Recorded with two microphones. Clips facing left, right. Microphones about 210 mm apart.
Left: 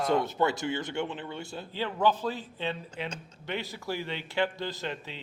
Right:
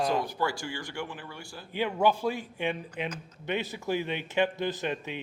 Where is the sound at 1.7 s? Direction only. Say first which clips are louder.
Right 2 dB; 15° right (ahead or behind).